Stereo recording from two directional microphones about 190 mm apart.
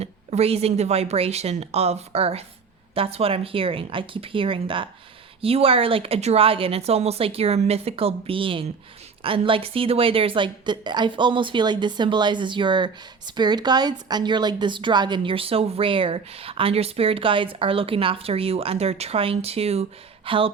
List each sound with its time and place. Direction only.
0.0 s a woman's voice: 35° right (ahead or behind)